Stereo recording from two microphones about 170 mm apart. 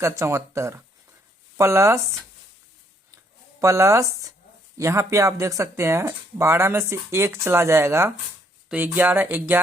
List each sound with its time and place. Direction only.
0.0 s speech: 15° right (ahead or behind)
3.6 s speech: 15° right (ahead or behind)